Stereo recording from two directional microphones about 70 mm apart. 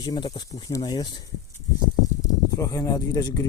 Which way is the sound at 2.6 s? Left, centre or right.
Left.